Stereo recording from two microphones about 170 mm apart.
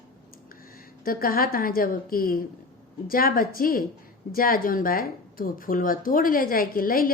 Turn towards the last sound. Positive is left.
turn(degrees=60)  # may be behind; listen again after turning